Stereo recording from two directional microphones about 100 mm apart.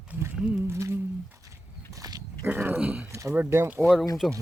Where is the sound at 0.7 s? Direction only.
25° right (ahead or behind).